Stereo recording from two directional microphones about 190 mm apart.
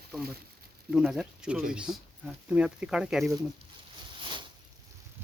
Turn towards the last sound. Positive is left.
turn(degrees=-25)  # may be behind; listen again after turning